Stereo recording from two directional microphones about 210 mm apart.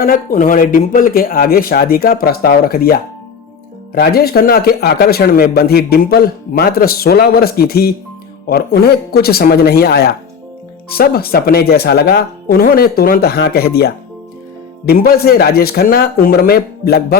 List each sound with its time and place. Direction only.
0.0 s speech: 40° left (ahead or behind)